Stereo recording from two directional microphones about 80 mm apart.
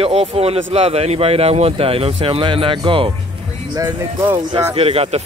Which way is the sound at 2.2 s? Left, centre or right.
Right.